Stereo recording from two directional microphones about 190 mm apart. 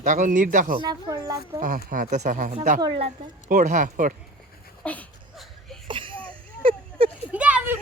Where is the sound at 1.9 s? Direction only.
40° right (ahead or behind).